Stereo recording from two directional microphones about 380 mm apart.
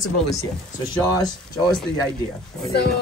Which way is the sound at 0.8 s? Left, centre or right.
Centre.